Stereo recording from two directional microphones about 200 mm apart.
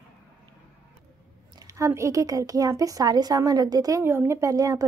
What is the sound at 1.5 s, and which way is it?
Speech, 15° right (ahead or behind).